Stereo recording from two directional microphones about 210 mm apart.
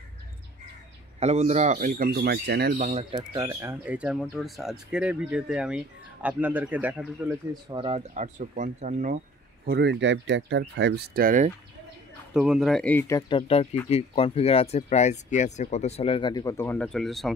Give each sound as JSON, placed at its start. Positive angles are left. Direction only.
{"t": 1.2, "sound": "speech", "side_deg": -30}
{"t": 2.8, "sound": "speech", "side_deg": -30}
{"t": 7.6, "sound": "speech", "side_deg": -25}
{"t": 9.7, "sound": "speech", "side_deg": -55}
{"t": 12.4, "sound": "speech", "side_deg": 0}